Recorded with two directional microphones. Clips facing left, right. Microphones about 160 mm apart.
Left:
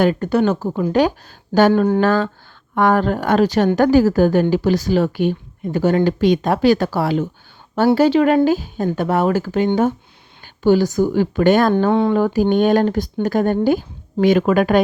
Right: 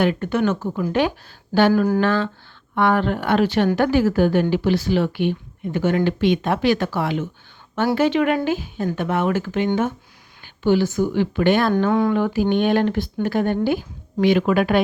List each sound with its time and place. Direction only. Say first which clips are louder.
0.0 s a woman's voice: left 4 dB; 40° left (ahead or behind)
1.7 s speech: left 3 dB; 25° left (ahead or behind)
2.0 s a woman's voice: left 3 dB; 40° left (ahead or behind)
11.8 s speech: left 3 dB; 25° left (ahead or behind)
12.1 s a woman's voice: left 4 dB; 40° left (ahead or behind)